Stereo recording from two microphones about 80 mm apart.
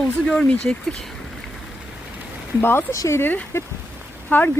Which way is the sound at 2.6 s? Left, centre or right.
Left.